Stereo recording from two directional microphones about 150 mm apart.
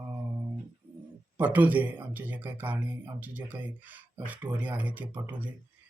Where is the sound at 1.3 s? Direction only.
10° right (ahead or behind).